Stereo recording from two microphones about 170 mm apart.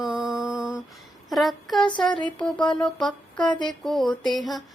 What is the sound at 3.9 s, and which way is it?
Mantra, centre (ahead or behind).